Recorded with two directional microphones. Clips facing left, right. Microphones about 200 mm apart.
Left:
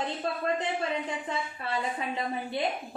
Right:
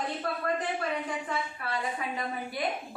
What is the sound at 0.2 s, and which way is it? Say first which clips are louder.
A woman's voice: left 2 dB; 25° left (ahead or behind).